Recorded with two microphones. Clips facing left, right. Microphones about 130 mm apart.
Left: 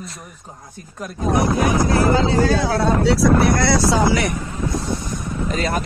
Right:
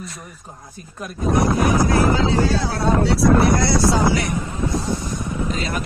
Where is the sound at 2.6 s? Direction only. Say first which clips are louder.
Left 2 dB; 85° left.